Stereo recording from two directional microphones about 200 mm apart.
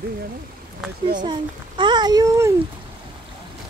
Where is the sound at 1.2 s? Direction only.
20° right (ahead or behind).